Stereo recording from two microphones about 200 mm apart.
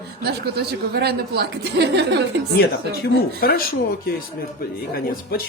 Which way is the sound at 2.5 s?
50° left (ahead or behind).